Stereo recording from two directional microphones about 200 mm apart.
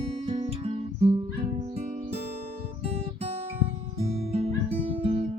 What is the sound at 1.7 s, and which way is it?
Music, 35° right (ahead or behind).